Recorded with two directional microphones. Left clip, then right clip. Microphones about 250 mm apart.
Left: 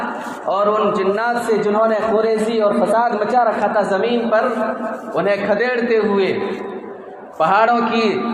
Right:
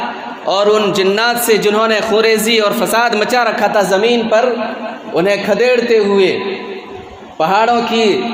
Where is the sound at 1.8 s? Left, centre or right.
Right.